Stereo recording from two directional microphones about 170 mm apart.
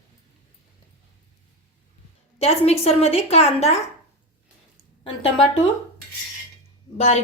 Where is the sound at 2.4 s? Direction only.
35° left (ahead or behind).